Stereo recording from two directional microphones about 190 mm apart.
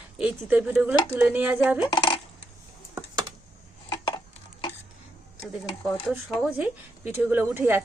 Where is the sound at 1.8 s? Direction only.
20° left (ahead or behind).